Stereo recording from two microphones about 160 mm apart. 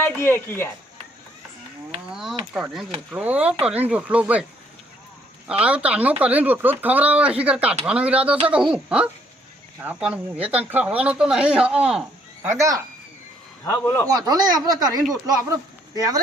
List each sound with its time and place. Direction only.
0.0 s speech: 15° left (ahead or behind)
2.0 s a sound: centre (ahead or behind)
3.1 s speech: 10° right (ahead or behind)
5.5 s speech: 5° right (ahead or behind)
13.7 s a man's voice: 20° left (ahead or behind)
14.1 s speech: 25° right (ahead or behind)